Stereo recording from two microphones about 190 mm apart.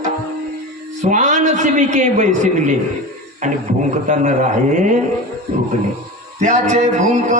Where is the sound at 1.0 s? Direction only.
40° right (ahead or behind).